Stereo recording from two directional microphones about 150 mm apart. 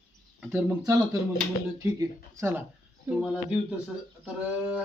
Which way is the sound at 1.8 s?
20° right (ahead or behind).